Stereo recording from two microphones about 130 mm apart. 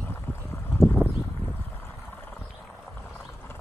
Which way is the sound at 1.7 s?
15° left (ahead or behind).